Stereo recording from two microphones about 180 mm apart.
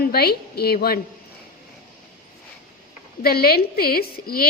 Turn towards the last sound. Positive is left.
turn(degrees=55)  # may be behind; listen again after turning